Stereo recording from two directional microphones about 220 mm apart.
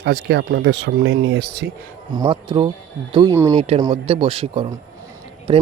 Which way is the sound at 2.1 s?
20° right (ahead or behind).